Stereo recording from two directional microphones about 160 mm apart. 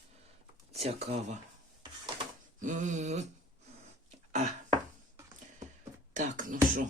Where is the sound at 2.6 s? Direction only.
50° right (ahead or behind).